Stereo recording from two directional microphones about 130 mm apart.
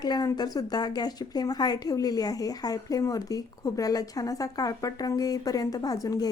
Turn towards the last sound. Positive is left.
turn(degrees=25)  # may be behind; listen again after turning